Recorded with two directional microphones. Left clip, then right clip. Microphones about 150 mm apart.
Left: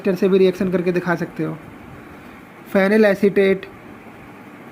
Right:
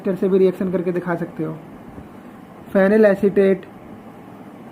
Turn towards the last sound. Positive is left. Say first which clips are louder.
# even
turn(degrees=50)  # may be behind; listen again after turning